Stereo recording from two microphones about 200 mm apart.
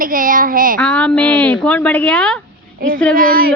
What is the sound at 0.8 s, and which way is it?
Speech, 5° left (ahead or behind).